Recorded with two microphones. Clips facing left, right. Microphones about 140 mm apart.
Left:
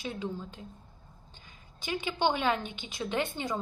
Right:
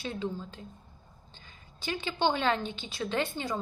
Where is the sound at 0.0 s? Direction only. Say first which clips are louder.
Right 1 dB; 15° left (ahead or behind).